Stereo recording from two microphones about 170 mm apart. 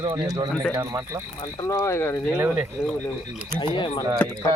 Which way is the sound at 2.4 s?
5° right (ahead or behind).